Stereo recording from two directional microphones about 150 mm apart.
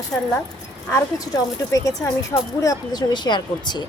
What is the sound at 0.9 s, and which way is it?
Speech, 20° left (ahead or behind).